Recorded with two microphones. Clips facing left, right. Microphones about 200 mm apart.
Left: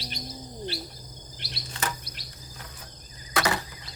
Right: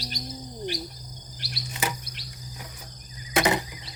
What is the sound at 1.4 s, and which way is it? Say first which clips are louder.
Cricket: right 4 dB; 20° left (ahead or behind).